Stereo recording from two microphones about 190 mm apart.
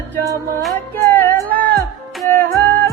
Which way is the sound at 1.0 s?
10° left (ahead or behind).